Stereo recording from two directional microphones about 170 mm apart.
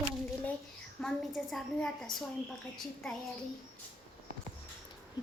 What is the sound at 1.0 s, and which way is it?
A woman's voice, centre (ahead or behind).